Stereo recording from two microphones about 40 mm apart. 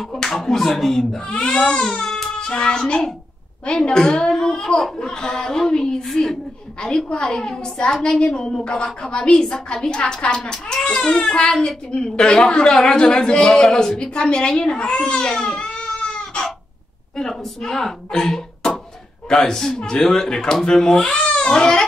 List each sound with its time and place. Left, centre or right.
0.0 s speech: centre
1.2 s speech: left
7.2 s speech: centre
15.0 s crying: left
17.2 s speech: centre